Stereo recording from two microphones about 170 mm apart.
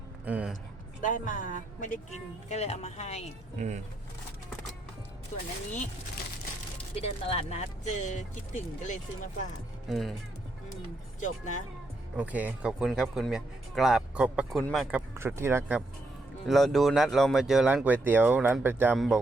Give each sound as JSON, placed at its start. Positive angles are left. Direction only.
{"t": 0.3, "sound": "speech", "side_deg": -10}
{"t": 1.0, "sound": "speech", "side_deg": 50}
{"t": 6.9, "sound": "speech", "side_deg": 35}
{"t": 9.9, "sound": "speech", "side_deg": 0}
{"t": 11.2, "sound": "speech", "side_deg": 45}
{"t": 12.1, "sound": "speech", "side_deg": -10}
{"t": 15.1, "sound": "speech", "side_deg": -15}
{"t": 16.5, "sound": "speech", "side_deg": 0}
{"t": 18.9, "sound": "speech", "side_deg": 0}